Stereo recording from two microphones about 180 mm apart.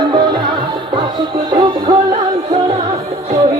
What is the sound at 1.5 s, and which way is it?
Music, 25° right (ahead or behind).